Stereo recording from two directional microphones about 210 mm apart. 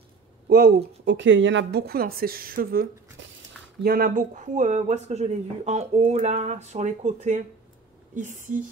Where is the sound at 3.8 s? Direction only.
45° right (ahead or behind).